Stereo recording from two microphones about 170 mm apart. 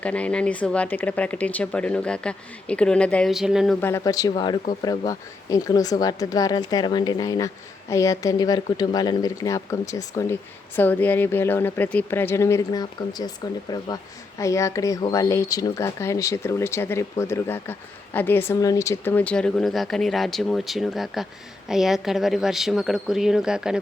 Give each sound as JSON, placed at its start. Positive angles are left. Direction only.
{"t": 0.0, "sound": "speech", "side_deg": 5}
{"t": 3.8, "sound": "speech", "side_deg": 15}